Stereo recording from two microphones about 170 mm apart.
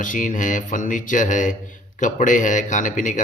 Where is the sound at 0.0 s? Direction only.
50° left (ahead or behind).